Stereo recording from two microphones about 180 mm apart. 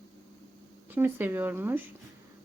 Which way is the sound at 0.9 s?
10° right (ahead or behind).